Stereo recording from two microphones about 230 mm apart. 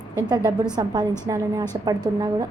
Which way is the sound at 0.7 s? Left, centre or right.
Centre.